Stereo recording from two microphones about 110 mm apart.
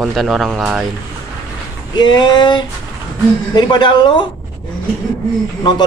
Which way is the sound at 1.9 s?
40° left (ahead or behind).